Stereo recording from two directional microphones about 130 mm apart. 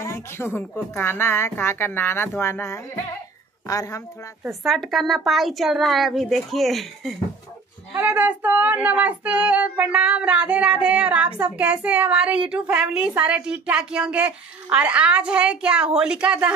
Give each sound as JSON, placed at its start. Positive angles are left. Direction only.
{"t": 0.0, "sound": "a woman's voice", "side_deg": 20}
{"t": 4.5, "sound": "speech", "side_deg": 0}
{"t": 7.9, "sound": "child singing", "side_deg": -10}